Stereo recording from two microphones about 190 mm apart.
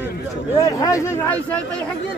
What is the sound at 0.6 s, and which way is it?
Speech, 20° left (ahead or behind).